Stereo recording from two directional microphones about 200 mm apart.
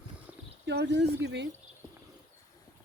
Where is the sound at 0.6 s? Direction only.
60° right (ahead or behind).